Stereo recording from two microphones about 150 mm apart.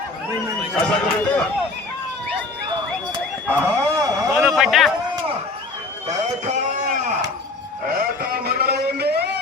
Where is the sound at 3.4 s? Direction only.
10° left (ahead or behind).